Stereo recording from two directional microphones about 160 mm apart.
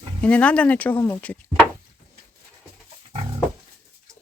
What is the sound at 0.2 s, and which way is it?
Speech, 10° left (ahead or behind).